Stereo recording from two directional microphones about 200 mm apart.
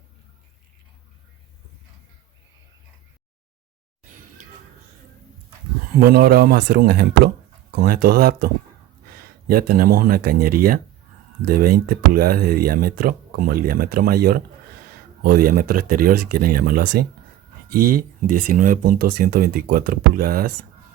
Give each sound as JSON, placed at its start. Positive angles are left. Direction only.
{"t": 6.0, "sound": "speech", "side_deg": -50}
{"t": 9.5, "sound": "speech", "side_deg": -45}